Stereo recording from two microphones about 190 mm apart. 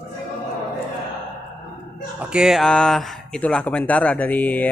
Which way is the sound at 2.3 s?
5° right (ahead or behind).